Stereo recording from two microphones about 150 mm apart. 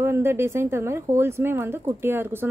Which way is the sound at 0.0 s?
15° right (ahead or behind).